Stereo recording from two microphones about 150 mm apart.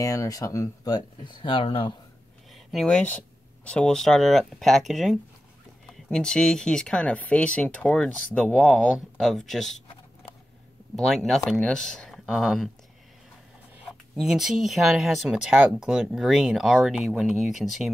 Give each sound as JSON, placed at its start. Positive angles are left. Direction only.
{"t": 0.0, "sound": "speech", "side_deg": 20}
{"t": 2.5, "sound": "speech", "side_deg": 0}
{"t": 11.1, "sound": "speech", "side_deg": 0}
{"t": 14.1, "sound": "speech", "side_deg": -5}